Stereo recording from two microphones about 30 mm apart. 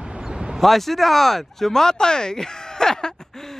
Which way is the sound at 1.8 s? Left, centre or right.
Left.